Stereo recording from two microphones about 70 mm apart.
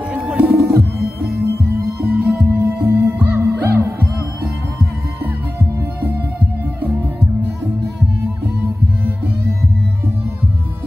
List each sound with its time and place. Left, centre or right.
0.1 s music: right
0.5 s music: right
1.8 s music: right